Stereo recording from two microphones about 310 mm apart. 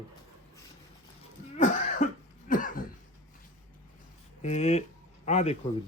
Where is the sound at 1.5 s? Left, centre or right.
Left.